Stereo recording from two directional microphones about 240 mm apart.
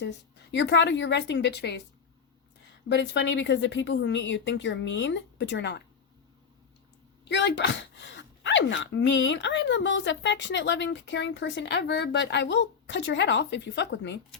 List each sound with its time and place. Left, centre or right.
0.5 s speech: left
2.9 s speech: left
7.3 s speech: left